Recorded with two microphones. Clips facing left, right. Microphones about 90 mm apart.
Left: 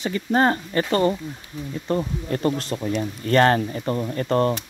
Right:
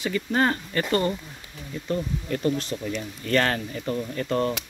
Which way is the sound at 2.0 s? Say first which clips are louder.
Left 3 dB; 40° left (ahead or behind).